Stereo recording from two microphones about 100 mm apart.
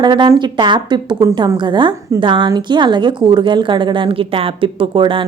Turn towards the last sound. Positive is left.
turn(degrees=-55)  # may be behind; listen again after turning